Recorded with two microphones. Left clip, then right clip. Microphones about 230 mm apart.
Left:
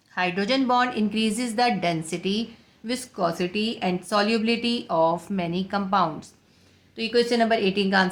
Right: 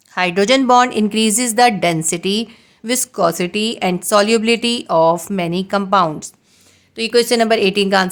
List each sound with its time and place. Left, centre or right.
0.1 s a woman's voice: right